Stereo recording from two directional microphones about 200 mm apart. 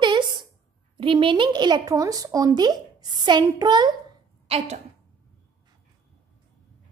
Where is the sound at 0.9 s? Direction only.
25° right (ahead or behind).